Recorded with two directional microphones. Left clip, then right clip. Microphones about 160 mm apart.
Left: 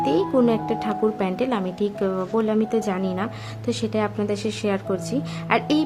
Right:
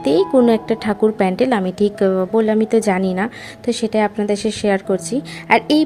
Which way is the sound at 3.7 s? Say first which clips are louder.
Right 7 dB; 25° right (ahead or behind).